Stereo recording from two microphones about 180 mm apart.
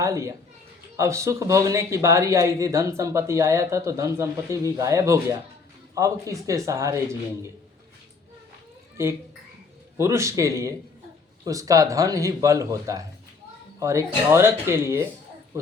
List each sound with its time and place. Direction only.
0.0 s speech: 15° right (ahead or behind)
10.0 s speech: 15° right (ahead or behind)